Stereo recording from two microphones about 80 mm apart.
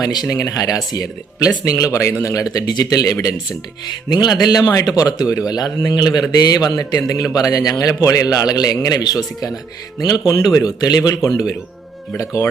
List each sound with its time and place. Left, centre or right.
0.0 s a man's voice: left
4.1 s a man's voice: left